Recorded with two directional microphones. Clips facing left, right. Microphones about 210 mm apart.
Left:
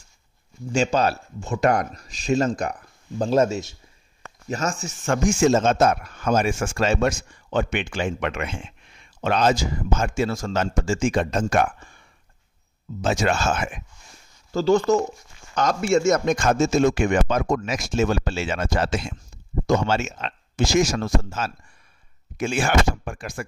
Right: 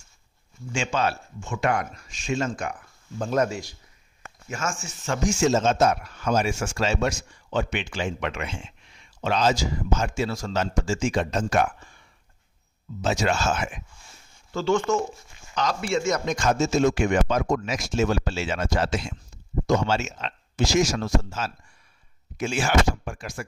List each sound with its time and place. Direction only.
0.7 s speech: 40° left (ahead or behind)
4.5 s speech: 35° left (ahead or behind)
5.0 s a man's voice: 55° left (ahead or behind)
13.0 s speech: 50° left (ahead or behind)
14.5 s speech: 35° left (ahead or behind)
15.6 s a man's voice: 50° left (ahead or behind)